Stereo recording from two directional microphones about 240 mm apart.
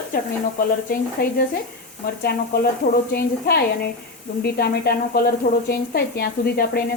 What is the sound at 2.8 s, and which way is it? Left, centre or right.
Speech, left.